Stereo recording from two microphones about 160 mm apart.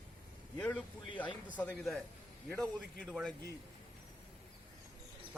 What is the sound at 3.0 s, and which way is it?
Speech, 5° right (ahead or behind).